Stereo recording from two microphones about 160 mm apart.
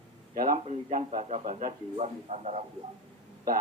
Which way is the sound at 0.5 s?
45° right (ahead or behind).